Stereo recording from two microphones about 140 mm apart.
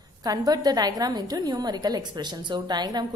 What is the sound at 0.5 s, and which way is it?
A woman's voice, 30° right (ahead or behind).